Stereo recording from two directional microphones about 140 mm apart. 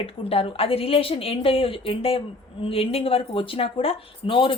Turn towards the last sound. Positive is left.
turn(degrees=40)  # may be behind; listen again after turning